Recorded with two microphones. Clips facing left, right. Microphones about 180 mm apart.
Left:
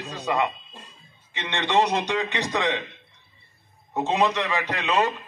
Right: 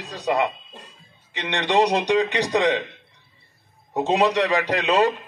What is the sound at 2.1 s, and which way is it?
Speech, 35° right (ahead or behind).